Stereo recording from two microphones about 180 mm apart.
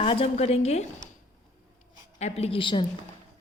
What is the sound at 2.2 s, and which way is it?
Speech, 35° left (ahead or behind).